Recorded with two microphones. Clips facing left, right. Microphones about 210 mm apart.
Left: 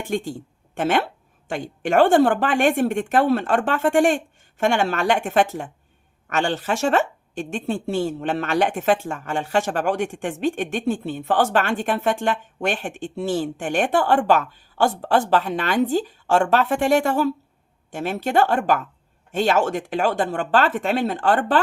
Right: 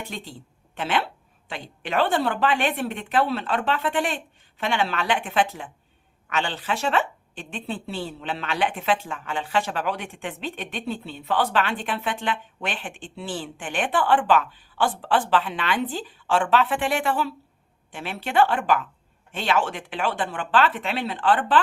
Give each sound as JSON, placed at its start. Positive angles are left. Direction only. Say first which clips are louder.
{"t": 0.0, "sound": "speech", "louder": "left 10 dB", "side_deg": 50}